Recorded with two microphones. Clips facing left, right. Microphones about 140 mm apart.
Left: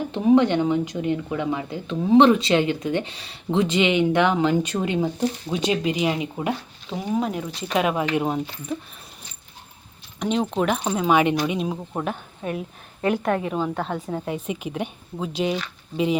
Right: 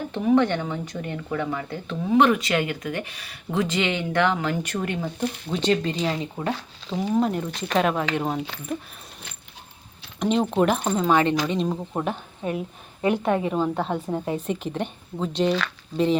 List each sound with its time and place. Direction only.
0.1 s speech: 15° left (ahead or behind)
6.9 s a woman's voice: centre (ahead or behind)
10.2 s a woman's voice: centre (ahead or behind)
11.0 s speech: 10° left (ahead or behind)
11.9 s a woman's voice: 10° right (ahead or behind)